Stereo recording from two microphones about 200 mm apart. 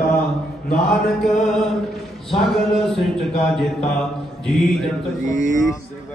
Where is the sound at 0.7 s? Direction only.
5° left (ahead or behind).